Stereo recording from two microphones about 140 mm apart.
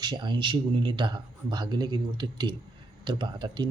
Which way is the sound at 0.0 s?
30° right (ahead or behind).